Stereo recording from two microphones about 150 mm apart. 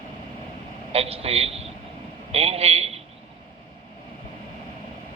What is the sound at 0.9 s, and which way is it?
A man's voice, 40° right (ahead or behind).